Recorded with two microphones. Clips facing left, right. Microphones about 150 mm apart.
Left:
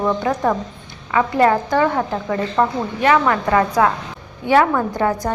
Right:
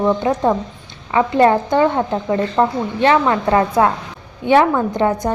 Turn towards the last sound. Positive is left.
turn(degrees=-20)  # may be behind; listen again after turning